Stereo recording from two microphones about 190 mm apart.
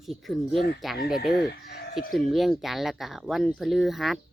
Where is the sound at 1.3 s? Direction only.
60° left (ahead or behind).